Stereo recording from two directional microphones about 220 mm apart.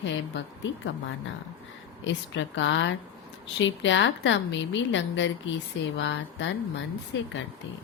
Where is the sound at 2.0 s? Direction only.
60° left (ahead or behind).